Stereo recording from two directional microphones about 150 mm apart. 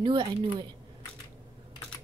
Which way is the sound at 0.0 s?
30° right (ahead or behind).